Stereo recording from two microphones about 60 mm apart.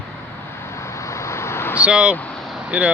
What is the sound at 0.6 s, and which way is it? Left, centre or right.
Vehicle, left.